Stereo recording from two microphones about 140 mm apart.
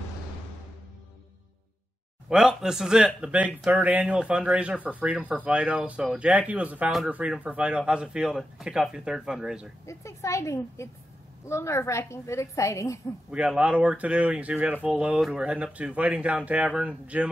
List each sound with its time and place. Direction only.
2.2 s speech: 5° right (ahead or behind)
9.8 s a woman's voice: 20° left (ahead or behind)
13.3 s speech: 10° right (ahead or behind)